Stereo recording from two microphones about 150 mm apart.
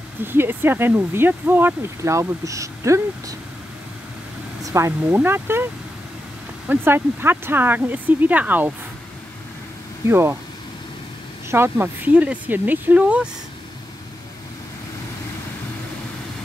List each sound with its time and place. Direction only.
0.2 s speech: 15° right (ahead or behind)
4.6 s speech: 20° right (ahead or behind)
6.7 s speech: 15° right (ahead or behind)
10.0 s speech: 15° right (ahead or behind)
11.5 s speech: 15° right (ahead or behind)